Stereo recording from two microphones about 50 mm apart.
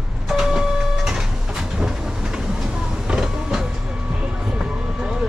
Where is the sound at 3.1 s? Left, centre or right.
Centre.